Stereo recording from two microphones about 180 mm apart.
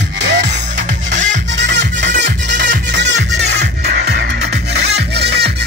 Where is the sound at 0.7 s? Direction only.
45° right (ahead or behind).